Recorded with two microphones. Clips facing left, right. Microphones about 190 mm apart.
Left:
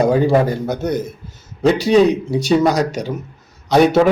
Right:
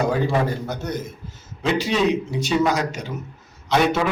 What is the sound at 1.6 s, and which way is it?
A man's voice, 40° left (ahead or behind).